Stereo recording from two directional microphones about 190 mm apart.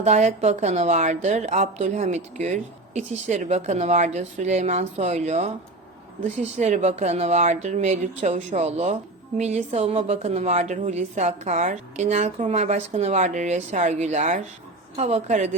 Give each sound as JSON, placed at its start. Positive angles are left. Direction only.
{"t": 0.0, "sound": "a woman's voice", "side_deg": -35}
{"t": 6.6, "sound": "a woman's voice", "side_deg": -35}